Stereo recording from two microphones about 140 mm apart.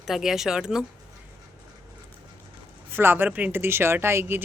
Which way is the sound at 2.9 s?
15° right (ahead or behind).